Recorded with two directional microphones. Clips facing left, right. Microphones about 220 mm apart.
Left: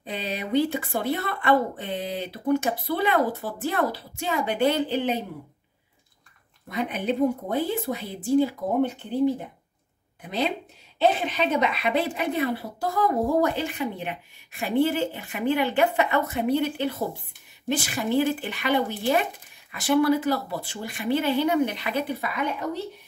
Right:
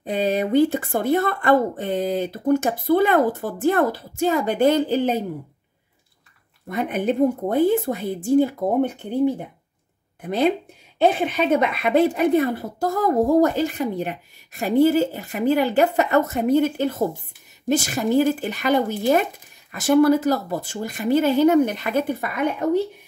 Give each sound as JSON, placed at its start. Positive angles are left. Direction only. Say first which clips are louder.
{"t": 0.0, "sound": "a woman's voice", "louder": "right 10 dB", "side_deg": -50}
{"t": 6.7, "sound": "a woman's voice", "louder": "right 4 dB", "side_deg": -50}
{"t": 10.2, "sound": "a woman's voice", "louder": "right 7 dB", "side_deg": -50}